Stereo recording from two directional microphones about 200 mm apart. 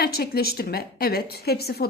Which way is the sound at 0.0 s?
50° left (ahead or behind).